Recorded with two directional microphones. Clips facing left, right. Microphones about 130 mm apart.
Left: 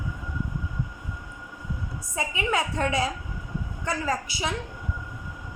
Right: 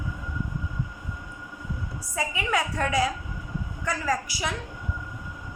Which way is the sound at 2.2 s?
25° left (ahead or behind).